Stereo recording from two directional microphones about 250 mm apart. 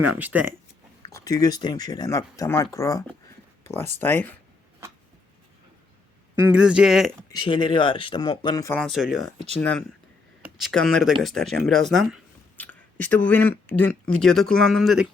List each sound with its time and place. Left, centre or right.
0.2 s speech: centre
1.1 s speech: centre
6.3 s speech: centre
7.3 s speech: centre